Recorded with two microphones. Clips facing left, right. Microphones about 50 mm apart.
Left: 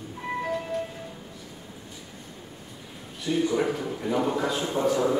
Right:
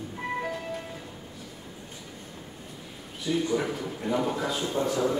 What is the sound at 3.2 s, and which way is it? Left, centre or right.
A man's voice, centre.